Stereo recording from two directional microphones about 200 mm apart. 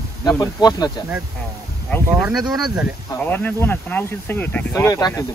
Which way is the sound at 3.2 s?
10° left (ahead or behind).